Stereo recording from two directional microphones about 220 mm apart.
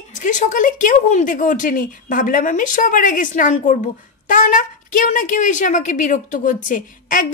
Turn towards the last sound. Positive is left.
turn(degrees=35)  # may be behind; listen again after turning